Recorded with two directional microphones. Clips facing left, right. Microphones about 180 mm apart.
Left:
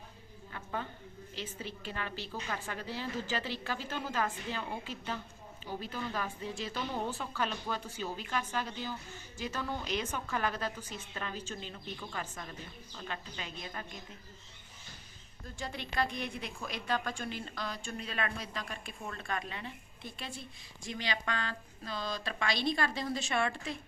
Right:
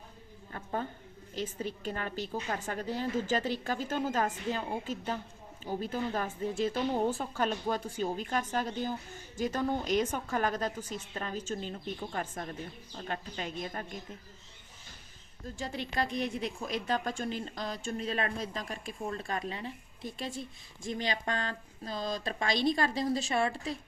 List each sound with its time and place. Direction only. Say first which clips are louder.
0.5 s a woman's voice: right 4 dB; 35° right (ahead or behind)
15.4 s a woman's voice: right 4 dB; 35° right (ahead or behind)